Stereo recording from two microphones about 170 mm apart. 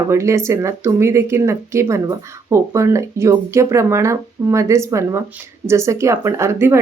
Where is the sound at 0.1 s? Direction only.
15° right (ahead or behind).